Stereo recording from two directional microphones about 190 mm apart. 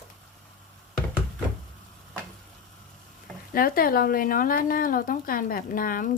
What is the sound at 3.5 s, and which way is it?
Speech, 50° left (ahead or behind).